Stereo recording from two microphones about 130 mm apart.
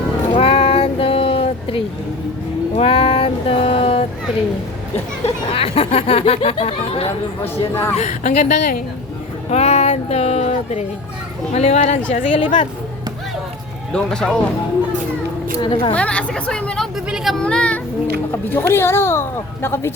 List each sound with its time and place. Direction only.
0.3 s a sound: 45° left (ahead or behind)
2.7 s music: 45° left (ahead or behind)
4.9 s speech: 50° left (ahead or behind)
7.9 s a woman's voice: 60° left (ahead or behind); by 8.8 s 80° left
9.5 s speech: 55° left (ahead or behind)
12.2 s a woman's voice: 40° left (ahead or behind)
13.9 s speech: 5° left (ahead or behind)
15.6 s a woman's voice: 40° left (ahead or behind)
16.0 s speech: 10° left (ahead or behind)
17.4 s child singing: 10° left (ahead or behind)
18.3 s speech: 15° left (ahead or behind)